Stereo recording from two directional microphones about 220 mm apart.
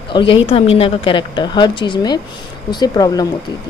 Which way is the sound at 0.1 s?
25° left (ahead or behind).